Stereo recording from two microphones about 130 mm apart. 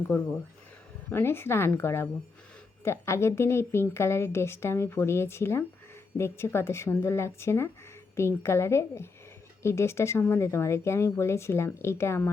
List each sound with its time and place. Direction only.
1.1 s a woman's voice: 20° left (ahead or behind)